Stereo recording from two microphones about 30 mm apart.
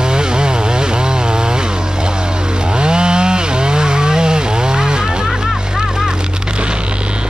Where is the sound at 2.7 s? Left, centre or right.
Right.